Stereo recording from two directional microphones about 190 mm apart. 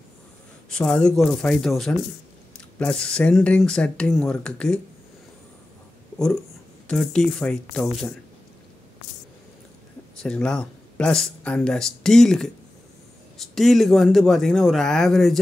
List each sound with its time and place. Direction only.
0.7 s speech: 5° left (ahead or behind)
6.9 s speech: 5° left (ahead or behind)
10.2 s speech: 5° left (ahead or behind)